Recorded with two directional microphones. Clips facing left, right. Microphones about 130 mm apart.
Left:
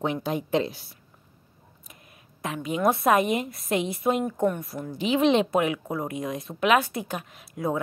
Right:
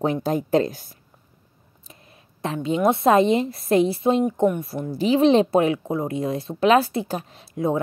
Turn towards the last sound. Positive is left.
turn(degrees=-25)  # may be behind; listen again after turning